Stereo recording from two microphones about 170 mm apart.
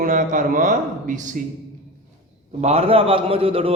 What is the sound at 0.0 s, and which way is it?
A man's voice, 50° right (ahead or behind).